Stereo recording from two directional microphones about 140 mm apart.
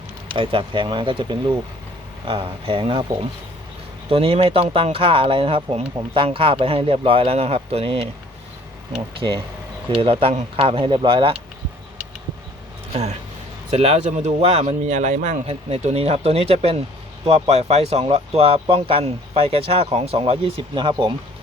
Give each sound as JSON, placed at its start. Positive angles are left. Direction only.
{"t": 0.3, "sound": "speech", "side_deg": -40}
{"t": 9.2, "sound": "speech", "side_deg": -30}
{"t": 9.9, "sound": "speech", "side_deg": -40}
{"t": 12.9, "sound": "speech", "side_deg": -50}